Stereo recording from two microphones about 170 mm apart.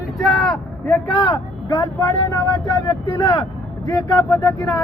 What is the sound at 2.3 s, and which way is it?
Speech, 20° left (ahead or behind).